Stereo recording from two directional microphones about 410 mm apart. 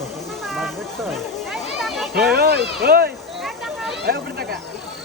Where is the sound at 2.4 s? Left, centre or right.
Right.